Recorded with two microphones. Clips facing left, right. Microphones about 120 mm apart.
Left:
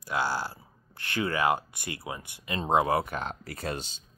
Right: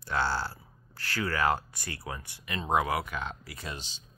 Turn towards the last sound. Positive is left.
turn(degrees=50)  # may be behind; listen again after turning